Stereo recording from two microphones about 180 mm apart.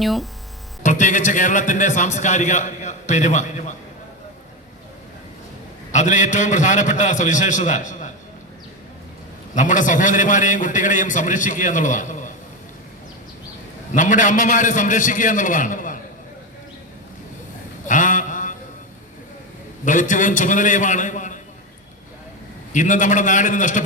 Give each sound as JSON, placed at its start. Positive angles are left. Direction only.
{"t": 0.0, "sound": "speech", "side_deg": 0}
{"t": 0.8, "sound": "a man's voice", "side_deg": 45}
{"t": 5.9, "sound": "a man's voice", "side_deg": 40}
{"t": 9.6, "sound": "a man's voice", "side_deg": 45}
{"t": 13.9, "sound": "a man's voice", "side_deg": 45}
{"t": 17.8, "sound": "a sound", "side_deg": 45}
{"t": 19.8, "sound": "a man's voice", "side_deg": 45}
{"t": 22.7, "sound": "a man's voice", "side_deg": 45}